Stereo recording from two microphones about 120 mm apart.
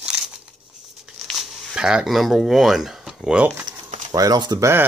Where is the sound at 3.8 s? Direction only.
90° right.